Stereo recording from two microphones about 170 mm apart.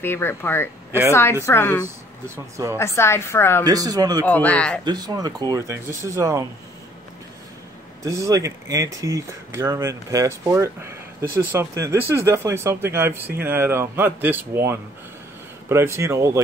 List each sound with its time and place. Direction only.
0.0 s a woman's voice: 15° left (ahead or behind)
2.2 s speech: 15° right (ahead or behind)
2.8 s a woman's voice: 15° left (ahead or behind)
3.6 s speech: 20° right (ahead or behind)
4.3 s a woman's voice: 10° left (ahead or behind)
4.8 s speech: 25° right (ahead or behind)
8.0 s speech: 20° right (ahead or behind)